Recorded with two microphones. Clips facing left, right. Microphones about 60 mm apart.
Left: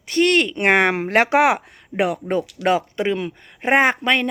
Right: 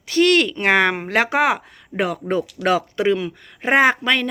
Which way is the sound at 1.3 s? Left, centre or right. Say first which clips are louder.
Left 3 dB; left.